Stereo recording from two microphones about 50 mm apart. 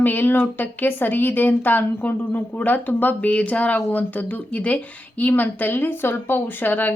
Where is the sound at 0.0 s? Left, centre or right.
Left.